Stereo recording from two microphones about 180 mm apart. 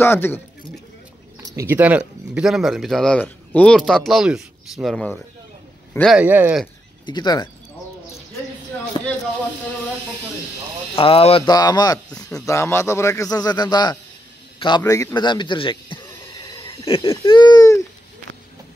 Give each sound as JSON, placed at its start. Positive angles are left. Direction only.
{"t": 0.0, "sound": "a man's voice", "side_deg": 10}
{"t": 1.6, "sound": "speech", "side_deg": -10}
{"t": 6.1, "sound": "speech", "side_deg": -10}
{"t": 7.1, "sound": "a man's voice", "side_deg": 25}
{"t": 9.0, "sound": "speech", "side_deg": 25}
{"t": 11.0, "sound": "a man's voice", "side_deg": 30}
{"t": 12.1, "sound": "speech", "side_deg": 5}
{"t": 12.4, "sound": "a man's voice", "side_deg": 15}
{"t": 16.4, "sound": "a sound", "side_deg": 25}
{"t": 17.1, "sound": "a man's voice", "side_deg": 20}